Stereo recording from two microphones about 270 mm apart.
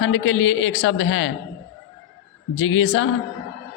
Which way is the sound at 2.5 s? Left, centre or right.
Left.